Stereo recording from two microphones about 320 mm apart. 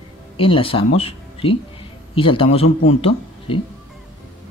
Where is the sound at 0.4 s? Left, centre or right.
Centre.